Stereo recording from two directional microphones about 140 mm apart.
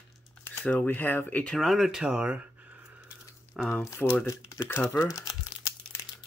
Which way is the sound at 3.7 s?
20° left (ahead or behind).